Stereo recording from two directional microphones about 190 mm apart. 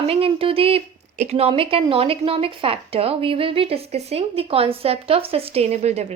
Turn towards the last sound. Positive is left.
turn(degrees=-35)  # may be behind; listen again after turning